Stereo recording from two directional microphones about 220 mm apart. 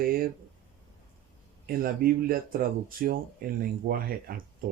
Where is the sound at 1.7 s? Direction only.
40° right (ahead or behind).